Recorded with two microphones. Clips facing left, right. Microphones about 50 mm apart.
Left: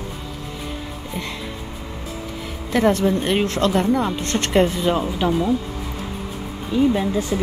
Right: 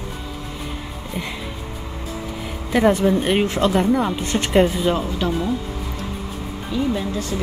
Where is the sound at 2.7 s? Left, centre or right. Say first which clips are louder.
Right 1 dB; centre.